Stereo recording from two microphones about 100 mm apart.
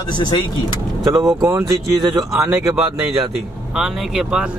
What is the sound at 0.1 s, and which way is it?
Speech, 50° left (ahead or behind).